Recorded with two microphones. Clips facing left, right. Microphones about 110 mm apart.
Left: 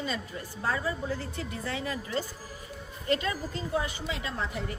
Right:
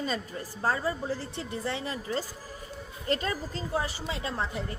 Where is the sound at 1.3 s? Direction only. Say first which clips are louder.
Right 1 dB; 25° right (ahead or behind).